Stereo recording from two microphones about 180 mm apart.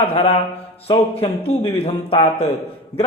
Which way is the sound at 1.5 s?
35° left (ahead or behind).